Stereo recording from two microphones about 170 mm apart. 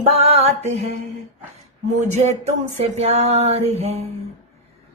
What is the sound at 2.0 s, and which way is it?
Music, 40° right (ahead or behind).